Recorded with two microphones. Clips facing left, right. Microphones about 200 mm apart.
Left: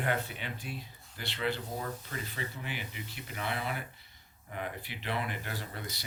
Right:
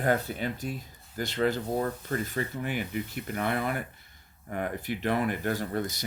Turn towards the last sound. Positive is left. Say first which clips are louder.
# right 11 dB
turn(degrees=-45)  # may be behind; listen again after turning